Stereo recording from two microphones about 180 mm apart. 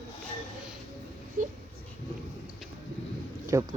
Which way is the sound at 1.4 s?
50° right (ahead or behind).